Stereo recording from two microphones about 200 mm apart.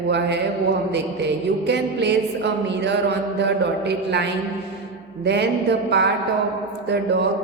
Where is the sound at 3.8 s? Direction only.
55° right (ahead or behind).